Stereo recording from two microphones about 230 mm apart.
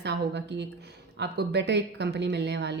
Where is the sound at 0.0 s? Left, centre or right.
Right.